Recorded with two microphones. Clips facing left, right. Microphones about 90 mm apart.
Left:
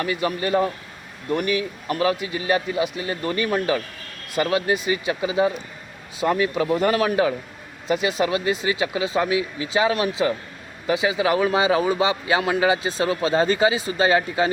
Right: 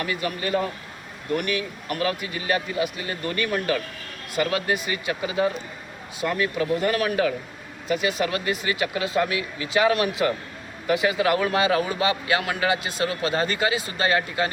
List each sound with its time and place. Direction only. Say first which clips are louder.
0.0 s a man's voice: left 4 dB; 25° left (ahead or behind)
6.7 s a man's voice: left 3 dB; 40° left (ahead or behind)
6.9 s a man's voice: left 3 dB; 25° left (ahead or behind)